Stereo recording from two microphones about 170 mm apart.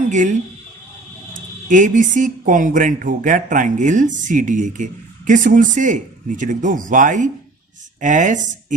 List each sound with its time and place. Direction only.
0.1 s speech: 45° right (ahead or behind)
1.6 s speech: 50° right (ahead or behind)